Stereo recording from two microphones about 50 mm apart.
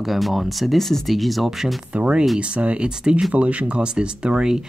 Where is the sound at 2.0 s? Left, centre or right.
Right.